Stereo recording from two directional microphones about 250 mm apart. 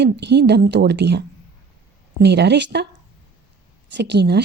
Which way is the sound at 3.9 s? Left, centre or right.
Right.